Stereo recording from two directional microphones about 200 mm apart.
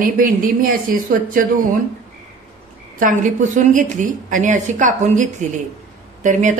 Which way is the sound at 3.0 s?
40° right (ahead or behind).